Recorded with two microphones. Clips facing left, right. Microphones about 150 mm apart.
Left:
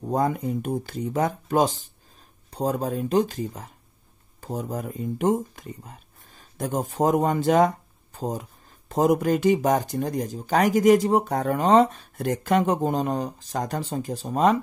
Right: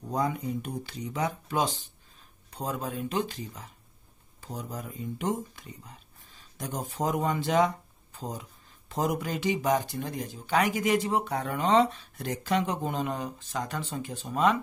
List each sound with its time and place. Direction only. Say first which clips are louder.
0.0 s speech: left 6 dB; 50° left (ahead or behind)